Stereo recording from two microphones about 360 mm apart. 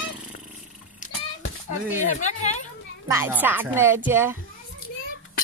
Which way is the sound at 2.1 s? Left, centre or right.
Centre.